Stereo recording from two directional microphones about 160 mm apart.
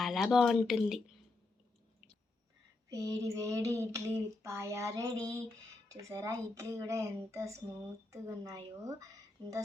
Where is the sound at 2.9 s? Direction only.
20° right (ahead or behind).